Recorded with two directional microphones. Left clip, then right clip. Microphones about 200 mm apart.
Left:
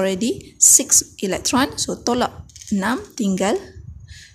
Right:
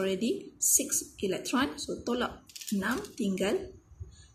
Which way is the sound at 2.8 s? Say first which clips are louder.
Left 10 dB; 45° left (ahead or behind).